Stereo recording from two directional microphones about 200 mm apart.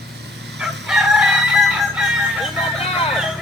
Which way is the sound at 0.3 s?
60° right (ahead or behind).